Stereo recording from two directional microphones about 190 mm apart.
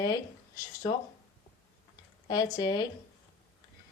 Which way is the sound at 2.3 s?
20° left (ahead or behind).